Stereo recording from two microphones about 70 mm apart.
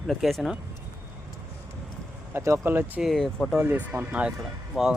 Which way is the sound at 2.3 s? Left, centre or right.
Right.